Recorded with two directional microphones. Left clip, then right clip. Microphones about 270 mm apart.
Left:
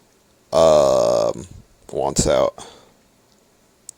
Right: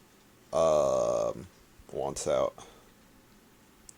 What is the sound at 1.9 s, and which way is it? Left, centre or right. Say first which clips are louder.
Speech: left 11 dB; left.